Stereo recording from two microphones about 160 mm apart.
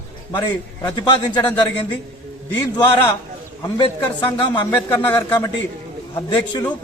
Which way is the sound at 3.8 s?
30° left (ahead or behind).